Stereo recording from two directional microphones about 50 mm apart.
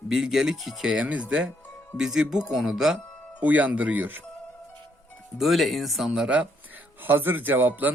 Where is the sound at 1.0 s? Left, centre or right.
Right.